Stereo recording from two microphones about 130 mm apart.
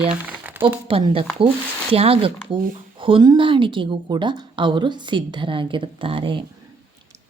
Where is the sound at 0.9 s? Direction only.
45° right (ahead or behind).